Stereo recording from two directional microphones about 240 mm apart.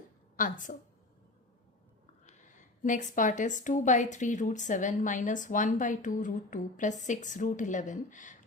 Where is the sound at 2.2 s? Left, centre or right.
Left.